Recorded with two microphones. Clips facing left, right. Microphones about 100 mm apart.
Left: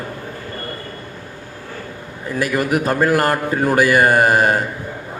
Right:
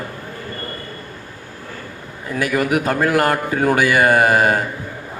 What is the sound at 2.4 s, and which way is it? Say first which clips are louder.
A man's voice: even; 35° left (ahead or behind).